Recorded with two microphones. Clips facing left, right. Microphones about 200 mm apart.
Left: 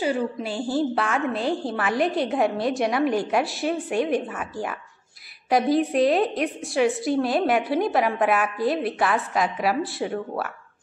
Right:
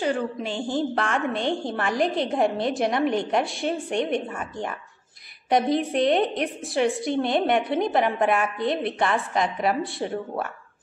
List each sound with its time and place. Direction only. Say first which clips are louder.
0.0 s a woman's voice: left 1 dB; 5° left (ahead or behind)